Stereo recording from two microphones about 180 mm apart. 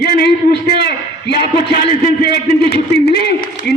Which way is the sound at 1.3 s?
30° right (ahead or behind).